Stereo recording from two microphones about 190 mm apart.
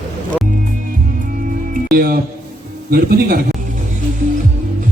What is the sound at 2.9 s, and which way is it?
Speech, 50° right (ahead or behind).